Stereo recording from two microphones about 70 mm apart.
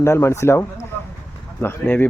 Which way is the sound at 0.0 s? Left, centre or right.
Left.